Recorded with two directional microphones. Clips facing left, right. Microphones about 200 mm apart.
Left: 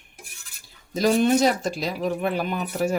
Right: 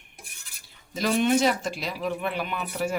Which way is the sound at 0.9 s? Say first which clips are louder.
Left 4 dB; 40° left (ahead or behind).